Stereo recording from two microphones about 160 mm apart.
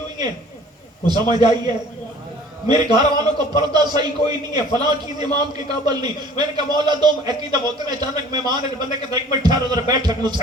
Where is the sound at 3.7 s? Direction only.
25° right (ahead or behind).